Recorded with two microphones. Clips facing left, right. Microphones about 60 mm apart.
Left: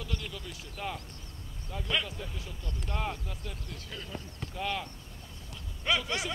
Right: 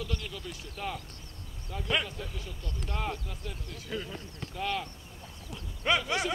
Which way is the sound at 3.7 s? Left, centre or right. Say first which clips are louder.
Right 6 dB; centre.